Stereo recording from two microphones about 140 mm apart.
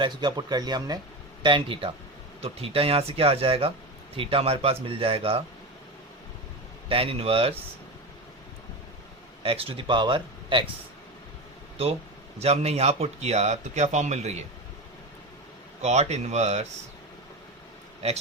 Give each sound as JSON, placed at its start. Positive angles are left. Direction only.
{"t": 0.0, "sound": "speech", "side_deg": -30}
{"t": 6.8, "sound": "speech", "side_deg": -40}
{"t": 9.4, "sound": "speech", "side_deg": -40}
{"t": 12.4, "sound": "speech", "side_deg": -50}
{"t": 15.8, "sound": "speech", "side_deg": -55}